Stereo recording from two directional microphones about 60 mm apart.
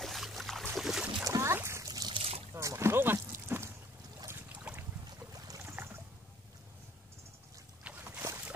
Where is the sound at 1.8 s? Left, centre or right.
Right.